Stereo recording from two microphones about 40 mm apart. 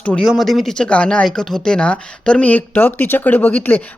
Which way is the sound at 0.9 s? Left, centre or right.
Left.